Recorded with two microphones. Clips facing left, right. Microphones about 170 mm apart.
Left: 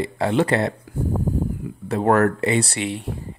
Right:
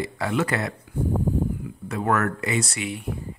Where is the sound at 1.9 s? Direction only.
35° left (ahead or behind).